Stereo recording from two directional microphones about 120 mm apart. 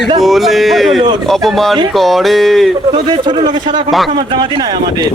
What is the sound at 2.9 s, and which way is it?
A man's voice, 40° right (ahead or behind).